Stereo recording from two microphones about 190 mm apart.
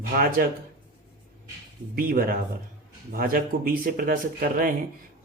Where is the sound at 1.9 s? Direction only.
50° right (ahead or behind).